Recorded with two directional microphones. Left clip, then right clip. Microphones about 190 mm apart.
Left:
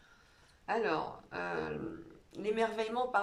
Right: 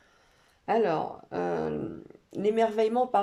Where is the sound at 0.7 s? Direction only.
35° right (ahead or behind).